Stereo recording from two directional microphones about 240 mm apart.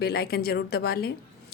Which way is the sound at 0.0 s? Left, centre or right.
Left.